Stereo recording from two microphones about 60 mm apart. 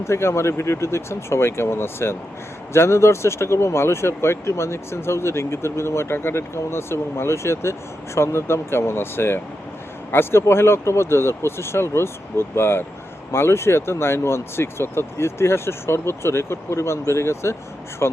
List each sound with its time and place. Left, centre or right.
0.0 s speech: left